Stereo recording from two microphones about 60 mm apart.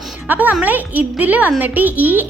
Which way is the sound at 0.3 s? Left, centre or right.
Right.